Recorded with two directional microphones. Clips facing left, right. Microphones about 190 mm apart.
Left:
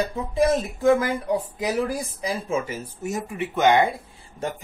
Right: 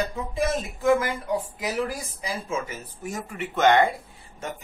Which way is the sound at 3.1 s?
15° left (ahead or behind).